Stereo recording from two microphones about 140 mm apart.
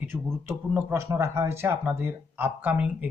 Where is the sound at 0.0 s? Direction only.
10° right (ahead or behind).